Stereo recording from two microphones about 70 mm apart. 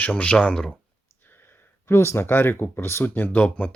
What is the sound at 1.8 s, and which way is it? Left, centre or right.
Speech, left.